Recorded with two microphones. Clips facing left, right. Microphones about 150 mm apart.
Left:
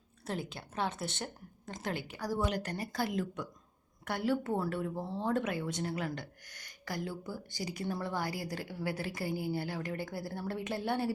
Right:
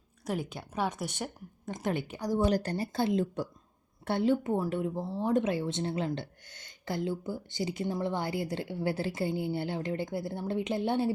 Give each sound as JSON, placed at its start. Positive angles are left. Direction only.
{"t": 0.5, "sound": "a woman's voice", "side_deg": -15}
{"t": 2.4, "sound": "speech", "side_deg": -30}